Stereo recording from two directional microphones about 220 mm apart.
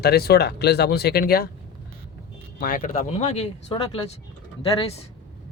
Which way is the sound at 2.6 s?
40° left (ahead or behind).